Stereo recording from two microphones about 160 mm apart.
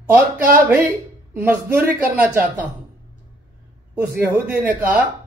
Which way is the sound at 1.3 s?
10° right (ahead or behind).